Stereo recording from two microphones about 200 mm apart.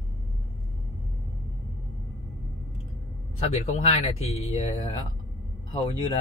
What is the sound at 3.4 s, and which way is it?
Speech, 30° left (ahead or behind).